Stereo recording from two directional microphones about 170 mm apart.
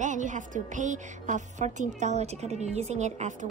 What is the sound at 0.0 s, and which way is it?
A woman's voice, 50° right (ahead or behind).